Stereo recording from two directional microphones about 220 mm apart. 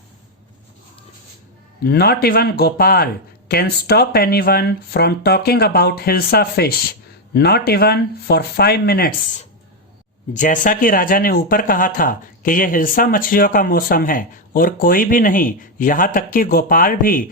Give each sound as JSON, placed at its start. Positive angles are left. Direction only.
{"t": 1.8, "sound": "speech", "side_deg": 45}
{"t": 10.3, "sound": "speech", "side_deg": 35}